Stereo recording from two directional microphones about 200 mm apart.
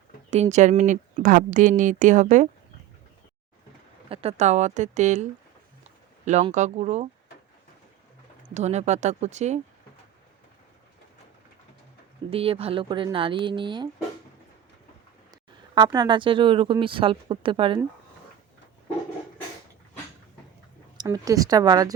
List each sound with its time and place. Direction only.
0.3 s speech: 35° right (ahead or behind)
4.1 s speech: 30° right (ahead or behind)
8.5 s speech: 35° right (ahead or behind)
12.3 s a woman's voice: 30° right (ahead or behind)
15.3 s speech: 20° right (ahead or behind)
21.0 s a woman's voice: 20° right (ahead or behind)